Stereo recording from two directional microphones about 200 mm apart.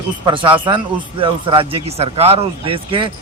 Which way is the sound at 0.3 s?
25° right (ahead or behind).